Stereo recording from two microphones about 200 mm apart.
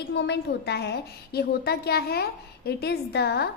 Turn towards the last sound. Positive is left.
turn(degrees=55)  # may be behind; listen again after turning